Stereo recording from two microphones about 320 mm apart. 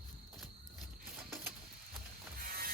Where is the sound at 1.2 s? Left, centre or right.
Centre.